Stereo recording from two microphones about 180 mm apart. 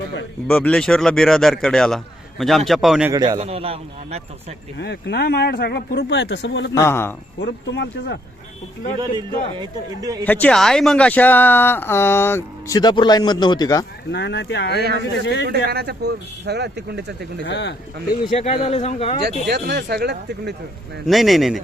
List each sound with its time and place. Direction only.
0.4 s speech: 5° left (ahead or behind)
3.1 s a man's voice: 20° right (ahead or behind)
3.4 s speech: 35° right (ahead or behind)
4.8 s speech: 70° left (ahead or behind)
6.7 s speech: 15° left (ahead or behind)
7.4 s speech: 70° left (ahead or behind)
9.0 s a man's voice: 25° right (ahead or behind)
10.2 s speech: 10° left (ahead or behind)
14.1 s speech: 75° left (ahead or behind)
15.7 s speech: 60° right (ahead or behind)
17.4 s speech: 70° left (ahead or behind)
18.3 s a man's voice: 35° left (ahead or behind)
19.5 s speech: 65° right (ahead or behind)
21.1 s speech: centre (ahead or behind)